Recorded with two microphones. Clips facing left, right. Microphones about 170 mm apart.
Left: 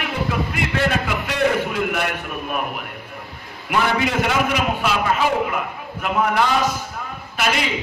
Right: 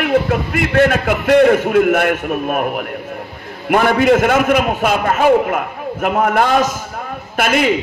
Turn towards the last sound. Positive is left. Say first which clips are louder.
# right 7 dB
turn(degrees=-50)  # may be behind; listen again after turning